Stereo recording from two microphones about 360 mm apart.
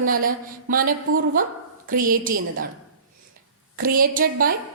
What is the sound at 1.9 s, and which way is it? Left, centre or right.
Speech, right.